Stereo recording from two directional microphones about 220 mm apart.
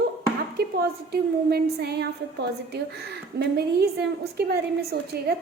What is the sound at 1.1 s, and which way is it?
A woman's voice, 45° right (ahead or behind).